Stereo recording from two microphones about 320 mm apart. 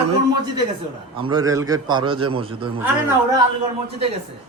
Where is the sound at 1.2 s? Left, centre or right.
Centre.